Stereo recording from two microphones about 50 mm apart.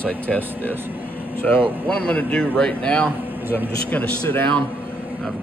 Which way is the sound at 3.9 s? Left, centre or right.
Left.